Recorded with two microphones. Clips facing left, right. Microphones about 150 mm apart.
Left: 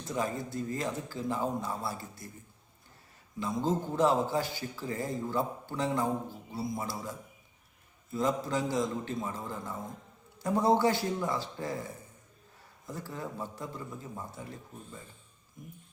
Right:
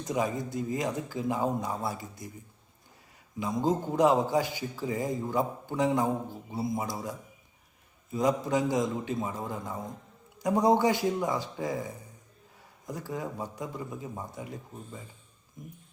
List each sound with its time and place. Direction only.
0.0 s a man's voice: 15° right (ahead or behind)
3.4 s a man's voice: 15° right (ahead or behind)
12.9 s a man's voice: 15° right (ahead or behind)